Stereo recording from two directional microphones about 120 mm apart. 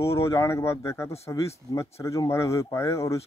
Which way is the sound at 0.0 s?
25° left (ahead or behind).